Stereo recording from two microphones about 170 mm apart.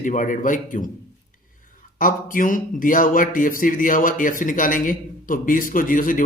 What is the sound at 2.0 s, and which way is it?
Speech, 55° left (ahead or behind).